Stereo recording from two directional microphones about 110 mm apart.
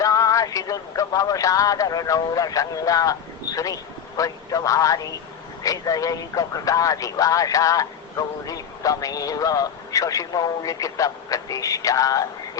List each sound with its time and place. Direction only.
0.0 s a man's voice: 30° left (ahead or behind)